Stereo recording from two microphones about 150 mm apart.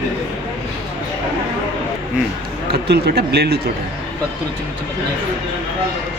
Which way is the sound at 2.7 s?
90° right.